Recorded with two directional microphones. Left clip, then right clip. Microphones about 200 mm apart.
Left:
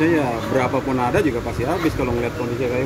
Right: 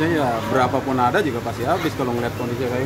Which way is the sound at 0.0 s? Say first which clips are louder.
Left 1 dB; 5° right (ahead or behind).